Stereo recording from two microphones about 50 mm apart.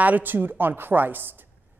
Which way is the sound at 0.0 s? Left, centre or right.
Right.